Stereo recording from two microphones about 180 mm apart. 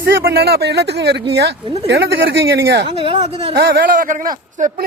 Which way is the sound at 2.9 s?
30° right (ahead or behind).